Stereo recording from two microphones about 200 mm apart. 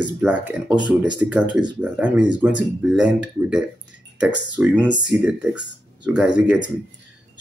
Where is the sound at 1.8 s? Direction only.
5° right (ahead or behind).